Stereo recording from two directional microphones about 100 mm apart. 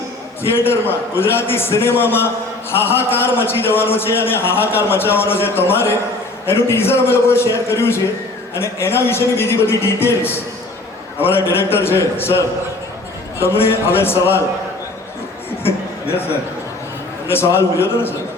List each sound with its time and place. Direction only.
0.4 s a man's voice: 25° left (ahead or behind)
13.4 s a man's voice: 25° left (ahead or behind)
15.6 s a sound: 25° left (ahead or behind)
17.2 s a man's voice: 25° left (ahead or behind)